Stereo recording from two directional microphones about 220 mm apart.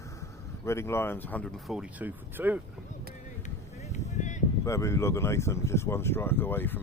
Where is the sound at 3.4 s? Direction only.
30° left (ahead or behind).